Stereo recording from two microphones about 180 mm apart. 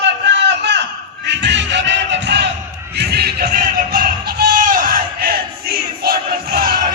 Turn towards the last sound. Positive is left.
turn(degrees=-55)  # may be behind; listen again after turning